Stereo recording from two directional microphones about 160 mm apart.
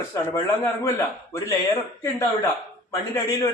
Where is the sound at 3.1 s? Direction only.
20° left (ahead or behind).